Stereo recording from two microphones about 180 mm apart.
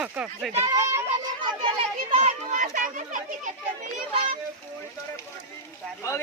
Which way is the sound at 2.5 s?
45° right (ahead or behind).